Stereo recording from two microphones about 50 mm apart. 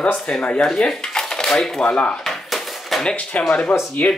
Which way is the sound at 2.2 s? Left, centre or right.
Centre.